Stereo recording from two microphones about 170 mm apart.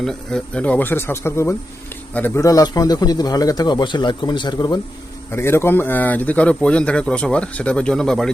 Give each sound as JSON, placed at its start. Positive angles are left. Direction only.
{"t": 0.0, "sound": "a man's voice", "side_deg": 5}
{"t": 5.3, "sound": "speech", "side_deg": 15}